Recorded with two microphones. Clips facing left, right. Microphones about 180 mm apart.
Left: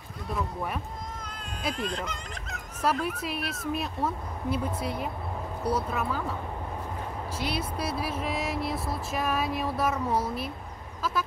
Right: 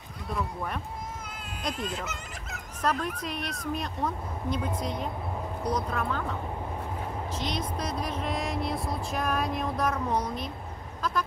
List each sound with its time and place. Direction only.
0.3 s speech: 5° left (ahead or behind)
2.8 s speech: 5° left (ahead or behind)
7.3 s speech: 10° left (ahead or behind)
11.0 s vehicle: 5° left (ahead or behind)